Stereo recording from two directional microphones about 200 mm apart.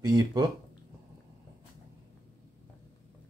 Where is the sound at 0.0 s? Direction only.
20° right (ahead or behind).